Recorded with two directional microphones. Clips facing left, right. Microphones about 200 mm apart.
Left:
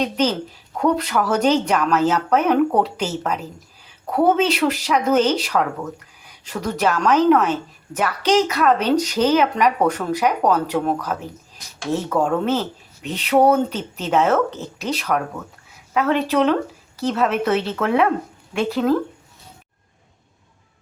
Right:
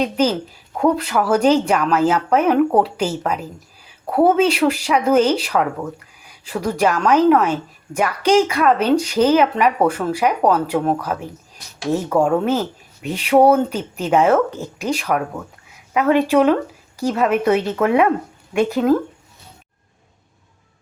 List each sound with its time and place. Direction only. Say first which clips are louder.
0.0 s speech: right 2 dB; 10° right (ahead or behind)